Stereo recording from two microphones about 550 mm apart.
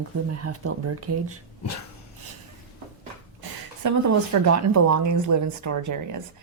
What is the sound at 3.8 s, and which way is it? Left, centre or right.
Speech, right.